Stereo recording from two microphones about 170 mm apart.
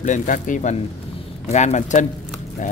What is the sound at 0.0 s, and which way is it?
Speech, 50° left (ahead or behind).